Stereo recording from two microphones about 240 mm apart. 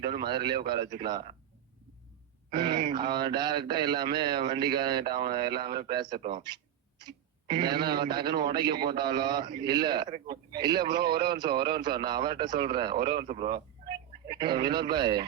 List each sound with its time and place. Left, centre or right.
0.0 s a man's voice: centre
2.5 s a man's voice: centre